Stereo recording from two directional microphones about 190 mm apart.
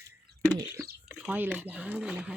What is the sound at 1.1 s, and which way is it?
Speech, 10° right (ahead or behind).